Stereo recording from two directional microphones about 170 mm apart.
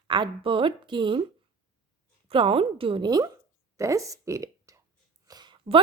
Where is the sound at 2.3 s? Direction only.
30° right (ahead or behind).